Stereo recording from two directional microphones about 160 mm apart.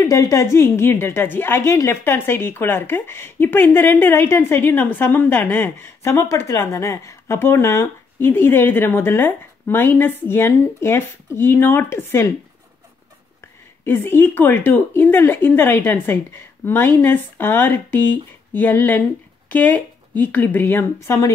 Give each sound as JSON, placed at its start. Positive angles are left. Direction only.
{"t": 0.0, "sound": "a woman's voice", "side_deg": 20}
{"t": 13.8, "sound": "a woman's voice", "side_deg": 15}